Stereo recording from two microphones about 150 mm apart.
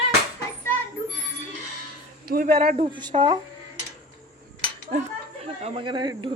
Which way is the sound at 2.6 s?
60° right (ahead or behind).